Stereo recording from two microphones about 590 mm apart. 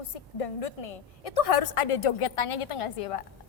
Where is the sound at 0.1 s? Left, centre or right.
Left.